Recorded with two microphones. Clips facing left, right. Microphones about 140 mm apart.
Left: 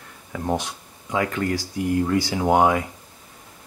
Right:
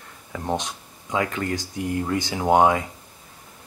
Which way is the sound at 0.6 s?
20° right (ahead or behind).